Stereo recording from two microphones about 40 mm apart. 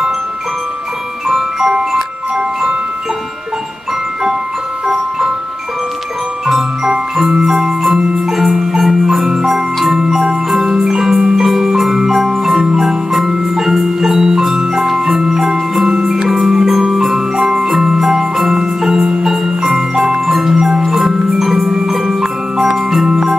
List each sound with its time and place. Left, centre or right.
1.3 s music: centre
6.4 s music: centre
7.5 s marimba: centre
10.7 s music: centre
12.6 s marimba: centre
14.9 s music: centre
18.5 s marimba: centre
19.2 s music: centre
20.2 s marimba: centre